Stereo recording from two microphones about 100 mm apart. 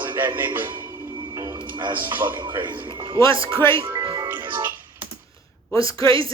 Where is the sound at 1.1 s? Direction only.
45° right (ahead or behind).